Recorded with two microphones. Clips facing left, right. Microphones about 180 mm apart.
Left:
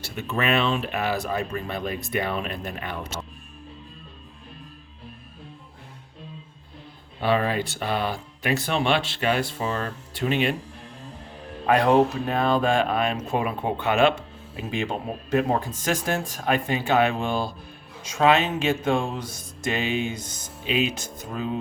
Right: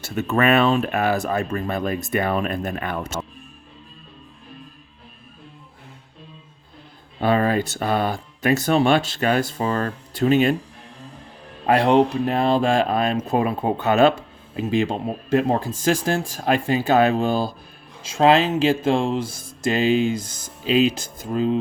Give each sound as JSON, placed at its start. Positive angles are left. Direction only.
{"t": 0.0, "sound": "speech", "side_deg": -50}
{"t": 7.2, "sound": "speech", "side_deg": -45}
{"t": 11.6, "sound": "speech", "side_deg": -30}